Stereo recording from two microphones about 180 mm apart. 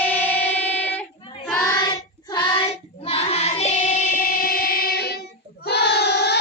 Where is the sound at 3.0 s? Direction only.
35° left (ahead or behind).